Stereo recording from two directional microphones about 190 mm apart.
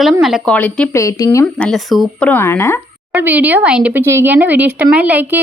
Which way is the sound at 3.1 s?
10° right (ahead or behind).